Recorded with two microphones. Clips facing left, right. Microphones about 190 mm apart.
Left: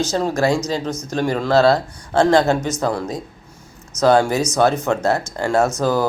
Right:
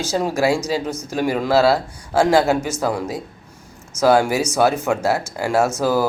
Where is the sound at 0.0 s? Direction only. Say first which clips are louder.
Left 1 dB; 10° right (ahead or behind).